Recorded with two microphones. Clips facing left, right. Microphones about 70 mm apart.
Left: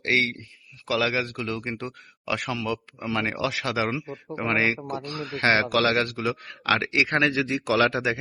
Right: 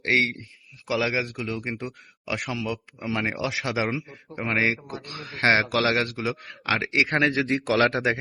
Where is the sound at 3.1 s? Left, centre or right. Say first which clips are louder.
Left 1 dB; centre.